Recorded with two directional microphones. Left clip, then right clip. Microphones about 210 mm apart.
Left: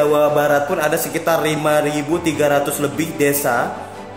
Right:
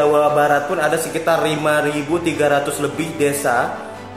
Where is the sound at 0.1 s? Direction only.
35° left (ahead or behind).